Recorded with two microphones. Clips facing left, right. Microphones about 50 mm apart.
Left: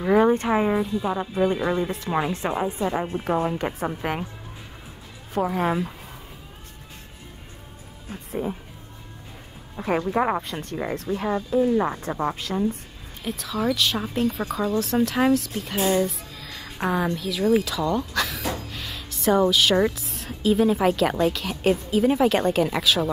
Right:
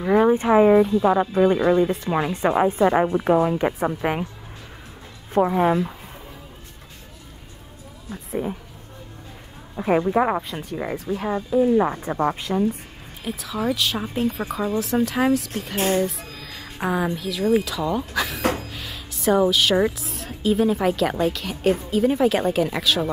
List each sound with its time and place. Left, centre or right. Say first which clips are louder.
0.0 s a sound: right 1 dB; centre
0.5 s a woman's voice: right 7 dB; centre
1.0 s speech: right 8 dB; right
1.6 s a woman's voice: right 6 dB; centre
2.3 s a woman's voice: right 6 dB; right
3.4 s a woman's voice: right 4 dB; centre
5.5 s a woman's voice: right 4 dB; centre
8.3 s a woman's voice: right 2 dB; centre
9.8 s a woman's voice: right 4 dB; centre
18.4 s gasp: right 6 dB; right
18.7 s a woman's voice: even; centre